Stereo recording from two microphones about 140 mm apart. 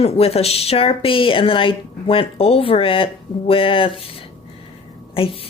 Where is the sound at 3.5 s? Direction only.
40° left (ahead or behind).